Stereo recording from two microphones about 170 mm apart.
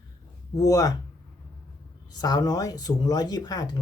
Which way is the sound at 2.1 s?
25° left (ahead or behind).